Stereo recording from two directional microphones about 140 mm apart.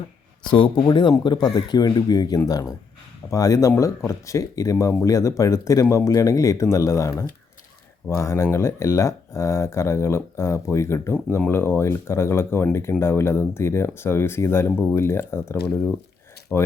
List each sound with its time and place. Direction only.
0.4 s speech: 35° left (ahead or behind); by 16.7 s 10° left (ahead or behind)